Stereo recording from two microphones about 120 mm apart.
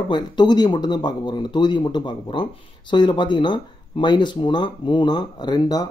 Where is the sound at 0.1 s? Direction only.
35° left (ahead or behind).